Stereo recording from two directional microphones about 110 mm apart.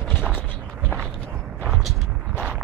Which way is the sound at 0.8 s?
5° left (ahead or behind).